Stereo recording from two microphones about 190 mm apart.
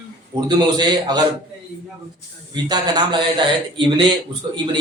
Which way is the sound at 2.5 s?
20° right (ahead or behind).